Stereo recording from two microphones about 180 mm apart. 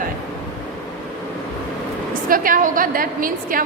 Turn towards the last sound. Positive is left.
turn(degrees=-50)  # may be behind; listen again after turning